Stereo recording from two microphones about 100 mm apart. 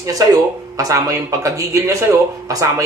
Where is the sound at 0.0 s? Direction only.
35° right (ahead or behind).